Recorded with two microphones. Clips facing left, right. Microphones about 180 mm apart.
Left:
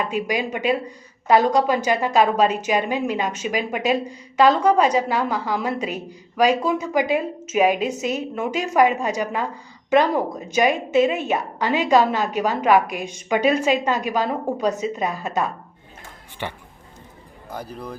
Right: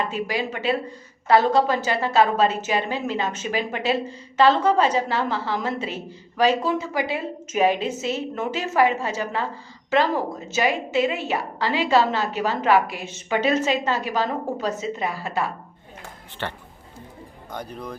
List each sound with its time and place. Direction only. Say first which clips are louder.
0.0 s a woman's voice: left 2 dB; 15° left (ahead or behind)
10.5 s a woman's voice: left 4 dB; 20° left (ahead or behind)